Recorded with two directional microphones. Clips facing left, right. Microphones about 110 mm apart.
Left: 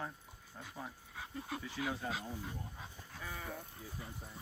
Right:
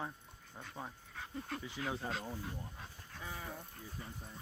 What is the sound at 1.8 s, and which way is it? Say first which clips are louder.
Speech: left 1 dB; 5° left (ahead or behind).